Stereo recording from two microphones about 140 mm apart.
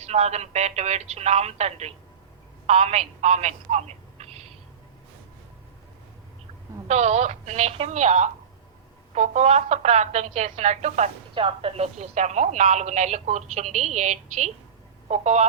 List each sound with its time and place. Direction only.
0.0 s a woman's voice: 50° right (ahead or behind)
6.8 s a woman's voice: 55° right (ahead or behind)
11.3 s speech: 40° right (ahead or behind)